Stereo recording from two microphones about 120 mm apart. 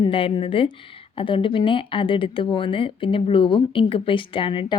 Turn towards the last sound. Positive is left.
turn(degrees=45)  # may be behind; listen again after turning